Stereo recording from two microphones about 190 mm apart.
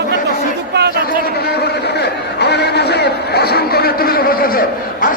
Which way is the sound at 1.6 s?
60° left (ahead or behind).